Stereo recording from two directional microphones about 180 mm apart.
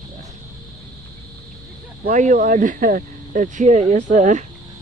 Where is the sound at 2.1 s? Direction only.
45° right (ahead or behind).